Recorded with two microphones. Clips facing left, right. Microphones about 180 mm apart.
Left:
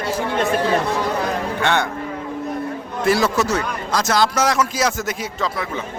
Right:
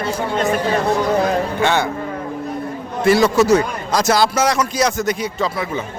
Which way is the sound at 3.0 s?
Centre (ahead or behind).